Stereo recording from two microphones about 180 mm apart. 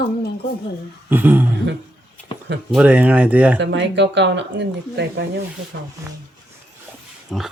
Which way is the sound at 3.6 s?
80° right.